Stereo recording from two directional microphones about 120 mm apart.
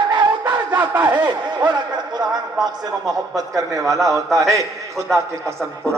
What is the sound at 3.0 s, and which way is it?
A man's voice, 30° right (ahead or behind).